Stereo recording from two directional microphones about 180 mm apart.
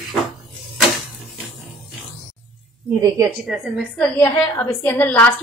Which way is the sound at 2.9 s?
15° right (ahead or behind).